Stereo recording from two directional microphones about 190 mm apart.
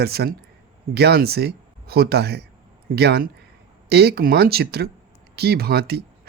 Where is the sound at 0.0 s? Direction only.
55° right (ahead or behind).